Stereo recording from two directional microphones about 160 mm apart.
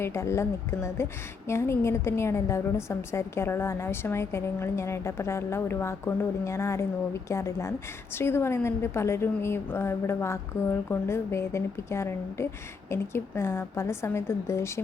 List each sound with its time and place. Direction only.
0.0 s a woman's voice: 15° left (ahead or behind)